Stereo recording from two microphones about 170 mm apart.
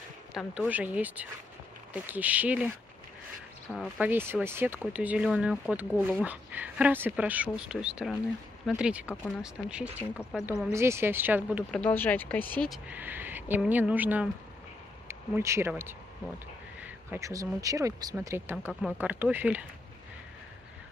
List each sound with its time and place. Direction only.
0.3 s speech: 5° right (ahead or behind)
3.7 s speech: centre (ahead or behind)
4.1 s speech: 15° right (ahead or behind)
11.7 s speech: 10° left (ahead or behind); by 18.7 s 15° right (ahead or behind)
18.7 s speech: centre (ahead or behind)